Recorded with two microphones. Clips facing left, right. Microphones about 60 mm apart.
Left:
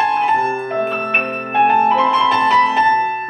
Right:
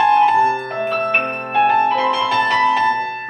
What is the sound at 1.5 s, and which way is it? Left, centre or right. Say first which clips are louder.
Music: left 2 dB; centre.